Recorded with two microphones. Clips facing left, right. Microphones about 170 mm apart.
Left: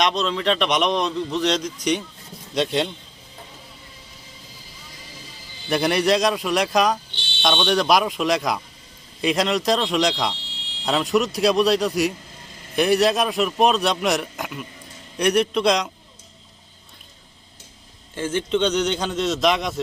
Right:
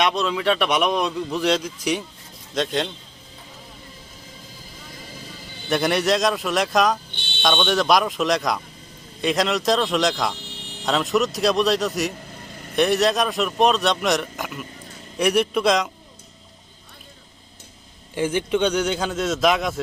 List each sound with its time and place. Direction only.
0.0 s a man's voice: 5° right (ahead or behind)
5.6 s a man's voice: centre (ahead or behind)
7.1 s music: 55° right (ahead or behind)
7.4 s a man's voice: centre (ahead or behind)
10.5 s a sound: 55° right (ahead or behind)
10.8 s a man's voice: centre (ahead or behind)
18.1 s a man's voice: 15° right (ahead or behind)